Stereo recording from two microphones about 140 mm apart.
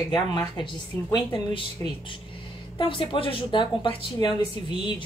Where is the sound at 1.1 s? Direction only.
35° left (ahead or behind).